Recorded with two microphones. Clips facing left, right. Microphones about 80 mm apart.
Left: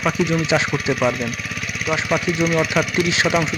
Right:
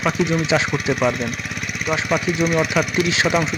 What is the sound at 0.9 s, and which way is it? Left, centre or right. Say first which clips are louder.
Speech: even; centre.